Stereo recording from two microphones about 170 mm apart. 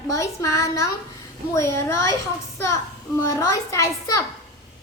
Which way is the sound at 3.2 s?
15° left (ahead or behind).